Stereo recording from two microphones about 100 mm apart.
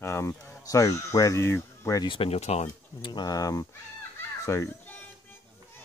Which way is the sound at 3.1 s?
40° left (ahead or behind).